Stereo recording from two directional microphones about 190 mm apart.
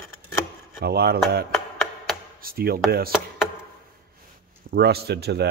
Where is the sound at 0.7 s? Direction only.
55° right (ahead or behind).